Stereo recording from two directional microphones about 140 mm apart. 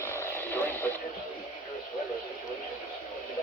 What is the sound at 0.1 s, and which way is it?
Radio, 15° left (ahead or behind).